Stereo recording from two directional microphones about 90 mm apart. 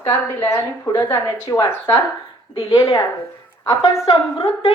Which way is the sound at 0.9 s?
30° left (ahead or behind).